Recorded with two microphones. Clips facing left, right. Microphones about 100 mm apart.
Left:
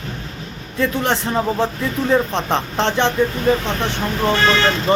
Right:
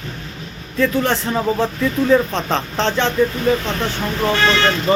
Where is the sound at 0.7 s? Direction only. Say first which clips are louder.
Right 2 dB; 20° left (ahead or behind).